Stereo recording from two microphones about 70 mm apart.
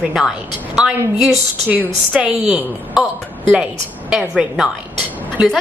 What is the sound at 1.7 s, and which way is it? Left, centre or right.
Speech, right.